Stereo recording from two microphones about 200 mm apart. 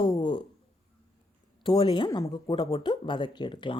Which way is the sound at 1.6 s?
20° left (ahead or behind).